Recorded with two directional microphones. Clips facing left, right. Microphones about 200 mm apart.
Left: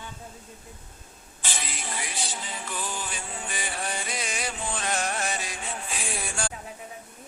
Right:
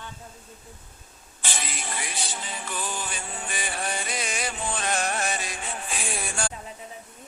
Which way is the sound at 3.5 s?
60° right (ahead or behind).